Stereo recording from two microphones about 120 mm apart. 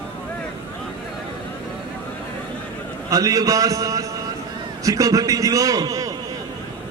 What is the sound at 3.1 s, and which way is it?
A man's voice, 30° right (ahead or behind).